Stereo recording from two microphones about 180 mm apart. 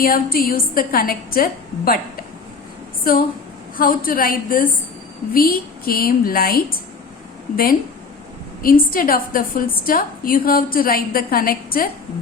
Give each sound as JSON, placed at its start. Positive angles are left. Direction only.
{"t": 0.0, "sound": "a woman's voice", "side_deg": 55}
{"t": 3.8, "sound": "a woman's voice", "side_deg": 50}